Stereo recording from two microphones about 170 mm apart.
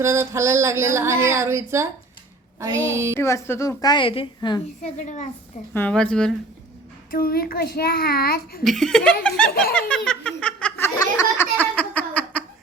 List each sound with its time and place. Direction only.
0.0 s a sound: 15° right (ahead or behind)
3.2 s a woman's voice: 15° left (ahead or behind)
4.8 s a woman's voice: 45° left (ahead or behind)
5.7 s a woman's voice: 10° left (ahead or behind)
7.1 s a child's voice: 60° left (ahead or behind)
8.6 s a woman's voice: centre (ahead or behind)
9.7 s laughter: 5° left (ahead or behind)